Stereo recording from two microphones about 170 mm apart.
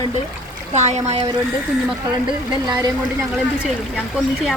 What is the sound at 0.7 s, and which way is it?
Speech, 40° right (ahead or behind).